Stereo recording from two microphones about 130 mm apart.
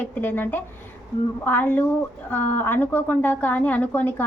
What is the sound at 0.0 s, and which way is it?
A woman's voice, 15° left (ahead or behind).